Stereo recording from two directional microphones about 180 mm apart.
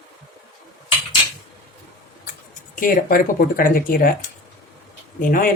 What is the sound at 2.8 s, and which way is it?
Speech, 50° left (ahead or behind).